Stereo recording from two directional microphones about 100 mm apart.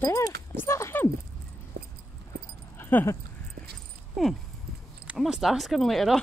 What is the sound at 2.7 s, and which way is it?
Dog, 20° left (ahead or behind).